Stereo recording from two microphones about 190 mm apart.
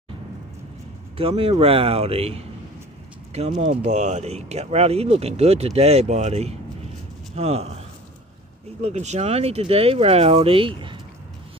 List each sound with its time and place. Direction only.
1.1 s speech: 30° right (ahead or behind)
8.8 s speech: 35° right (ahead or behind)